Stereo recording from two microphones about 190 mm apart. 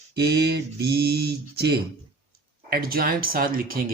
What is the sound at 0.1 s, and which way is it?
Speech, 55° right (ahead or behind).